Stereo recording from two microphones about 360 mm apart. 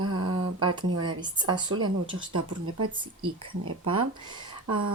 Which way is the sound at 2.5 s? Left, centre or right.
Right.